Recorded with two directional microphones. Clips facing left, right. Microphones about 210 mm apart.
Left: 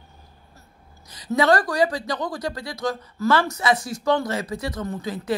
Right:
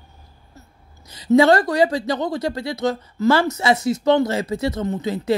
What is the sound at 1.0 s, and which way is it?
Speech, 25° right (ahead or behind).